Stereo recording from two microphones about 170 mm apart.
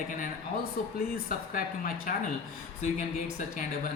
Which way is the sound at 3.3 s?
50° left (ahead or behind).